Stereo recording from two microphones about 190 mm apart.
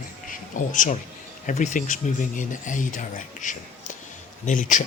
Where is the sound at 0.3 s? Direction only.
40° left (ahead or behind).